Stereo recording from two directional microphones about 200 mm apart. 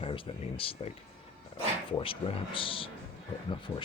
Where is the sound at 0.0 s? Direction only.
25° left (ahead or behind).